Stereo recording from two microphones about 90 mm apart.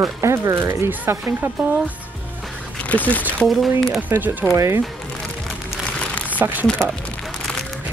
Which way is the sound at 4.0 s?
20° right (ahead or behind).